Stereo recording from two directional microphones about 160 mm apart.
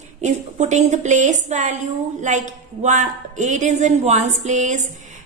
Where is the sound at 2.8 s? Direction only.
45° right (ahead or behind).